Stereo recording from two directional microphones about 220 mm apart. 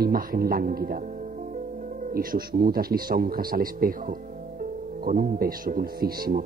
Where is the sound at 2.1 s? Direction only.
45° right (ahead or behind).